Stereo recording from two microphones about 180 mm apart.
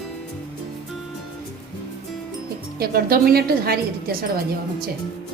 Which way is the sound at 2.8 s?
55° right (ahead or behind).